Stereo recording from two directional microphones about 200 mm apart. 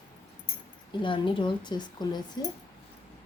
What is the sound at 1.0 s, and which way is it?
Speech, 25° left (ahead or behind).